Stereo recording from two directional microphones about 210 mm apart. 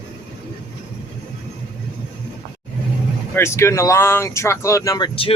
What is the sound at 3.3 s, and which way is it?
Speech, 10° left (ahead or behind).